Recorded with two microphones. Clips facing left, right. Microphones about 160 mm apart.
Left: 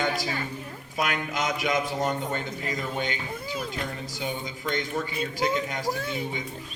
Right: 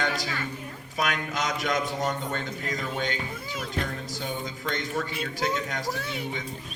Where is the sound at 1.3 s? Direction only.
5° left (ahead or behind).